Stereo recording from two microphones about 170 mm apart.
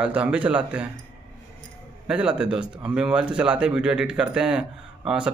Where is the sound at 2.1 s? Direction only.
5° right (ahead or behind).